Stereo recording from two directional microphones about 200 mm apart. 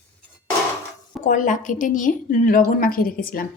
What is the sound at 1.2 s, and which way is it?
A woman's voice, 40° left (ahead or behind).